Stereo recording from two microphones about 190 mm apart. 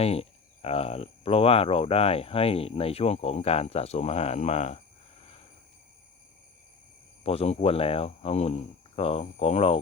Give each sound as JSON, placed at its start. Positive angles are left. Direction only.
{"t": 0.0, "sound": "speech", "side_deg": 30}
{"t": 7.3, "sound": "speech", "side_deg": 30}